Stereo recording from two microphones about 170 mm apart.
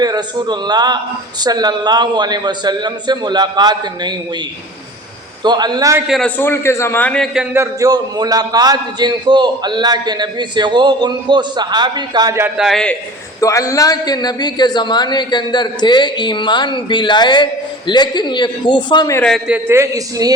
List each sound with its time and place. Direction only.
0.0 s a man's voice: 25° right (ahead or behind)
5.4 s a man's voice: 25° right (ahead or behind)
6.1 s a man's voice: 5° left (ahead or behind)
7.3 s a man's voice: 15° right (ahead or behind)
12.5 s a man's voice: centre (ahead or behind)
13.4 s a man's voice: 20° left (ahead or behind)
19.1 s a man's voice: 5° left (ahead or behind)
19.5 s a man's voice: 10° right (ahead or behind)